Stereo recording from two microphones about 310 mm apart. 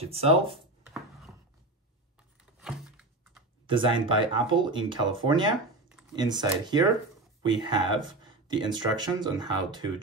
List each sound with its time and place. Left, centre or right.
0.0 s speech: centre
2.6 s a sound: centre
3.7 s speech: centre